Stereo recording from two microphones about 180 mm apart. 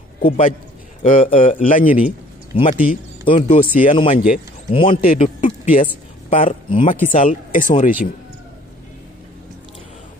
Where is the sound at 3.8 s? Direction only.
30° left (ahead or behind).